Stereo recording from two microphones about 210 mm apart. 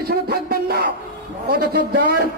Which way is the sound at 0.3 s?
45° right (ahead or behind).